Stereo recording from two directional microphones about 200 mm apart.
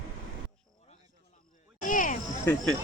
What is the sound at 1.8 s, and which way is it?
Cricket, 40° left (ahead or behind).